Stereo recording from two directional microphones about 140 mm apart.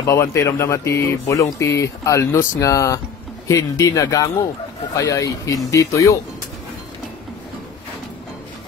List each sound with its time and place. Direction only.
0.0 s speech: 20° left (ahead or behind)